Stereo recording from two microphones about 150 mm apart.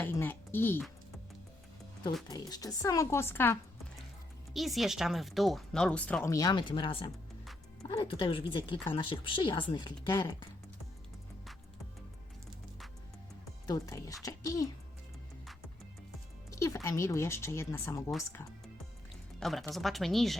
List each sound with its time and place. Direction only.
0.0 s speech: 15° left (ahead or behind)
2.2 s speech: 25° left (ahead or behind)
4.5 s speech: centre (ahead or behind)
6.3 s speech: 25° left (ahead or behind)
13.7 s speech: 25° left (ahead or behind)
16.5 s speech: 20° left (ahead or behind)
19.4 s speech: centre (ahead or behind)